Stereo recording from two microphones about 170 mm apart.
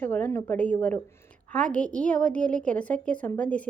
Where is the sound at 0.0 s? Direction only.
10° left (ahead or behind).